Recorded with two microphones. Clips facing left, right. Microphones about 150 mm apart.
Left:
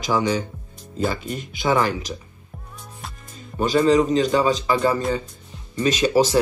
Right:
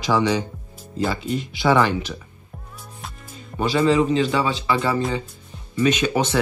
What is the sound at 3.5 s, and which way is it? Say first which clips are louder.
A man's voice: left 1 dB; 40° left (ahead or behind).